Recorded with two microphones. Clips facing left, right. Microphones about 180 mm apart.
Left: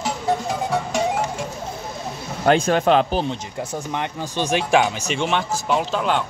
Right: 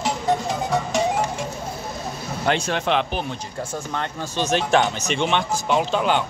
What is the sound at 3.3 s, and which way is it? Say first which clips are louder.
Speech: left 2 dB; 15° left (ahead or behind).